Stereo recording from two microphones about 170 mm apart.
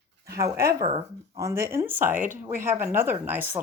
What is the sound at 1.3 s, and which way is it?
Speech, 20° right (ahead or behind).